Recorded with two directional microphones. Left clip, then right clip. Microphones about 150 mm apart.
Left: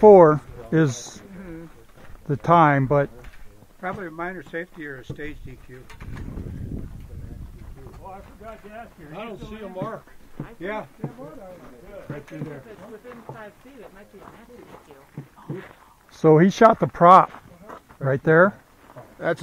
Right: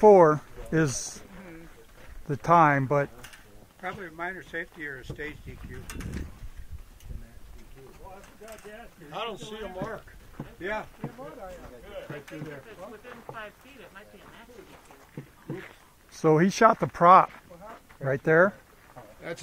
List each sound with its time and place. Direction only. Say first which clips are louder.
0.0 s speech: left 5 dB; centre (ahead or behind)
2.2 s speech: left 4 dB; centre (ahead or behind)
3.8 s speech: left 5 dB; 15° left (ahead or behind)
4.4 s speech: left 3 dB; centre (ahead or behind)
9.1 s speech: right 2 dB; 70° right (ahead or behind)
16.2 s speech: left 6 dB; centre (ahead or behind)